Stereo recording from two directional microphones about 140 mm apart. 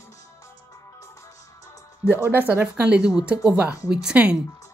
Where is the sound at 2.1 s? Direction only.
15° right (ahead or behind).